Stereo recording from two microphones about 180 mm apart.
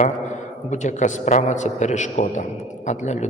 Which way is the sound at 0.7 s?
40° left (ahead or behind).